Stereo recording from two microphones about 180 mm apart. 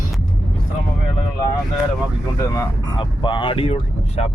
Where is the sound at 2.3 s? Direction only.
20° left (ahead or behind).